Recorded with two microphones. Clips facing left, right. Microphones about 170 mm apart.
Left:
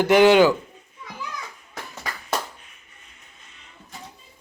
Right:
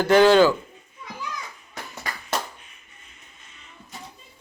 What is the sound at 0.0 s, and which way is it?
Speech, 15° left (ahead or behind).